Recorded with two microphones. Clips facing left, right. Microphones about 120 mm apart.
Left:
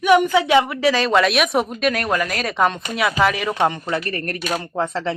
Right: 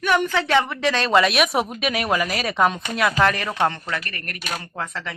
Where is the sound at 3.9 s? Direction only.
35° left (ahead or behind).